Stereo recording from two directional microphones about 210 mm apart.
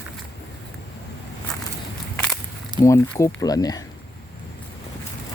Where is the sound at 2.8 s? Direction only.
15° left (ahead or behind).